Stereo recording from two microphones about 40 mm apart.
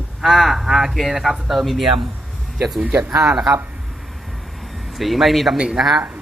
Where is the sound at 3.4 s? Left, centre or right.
Right.